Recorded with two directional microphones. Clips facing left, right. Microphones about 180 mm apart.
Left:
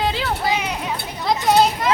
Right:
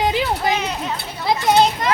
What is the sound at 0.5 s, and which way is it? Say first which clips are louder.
A child's voice: right 1 dB; 10° left (ahead or behind).